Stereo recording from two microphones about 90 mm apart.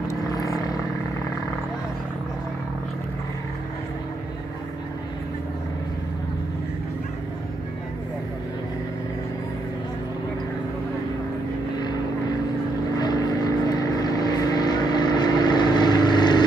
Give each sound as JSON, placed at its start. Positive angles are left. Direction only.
{"t": 0.1, "sound": "vehicle", "side_deg": 40}
{"t": 13.0, "sound": "vehicle", "side_deg": 50}